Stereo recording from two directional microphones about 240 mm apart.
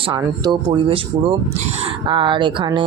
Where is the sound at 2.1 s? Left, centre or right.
Right.